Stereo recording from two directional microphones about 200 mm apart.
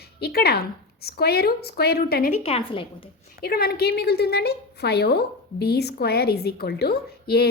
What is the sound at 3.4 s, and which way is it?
A woman's voice, 50° left (ahead or behind).